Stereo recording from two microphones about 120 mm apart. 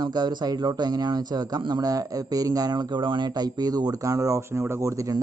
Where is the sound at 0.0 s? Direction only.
35° right (ahead or behind).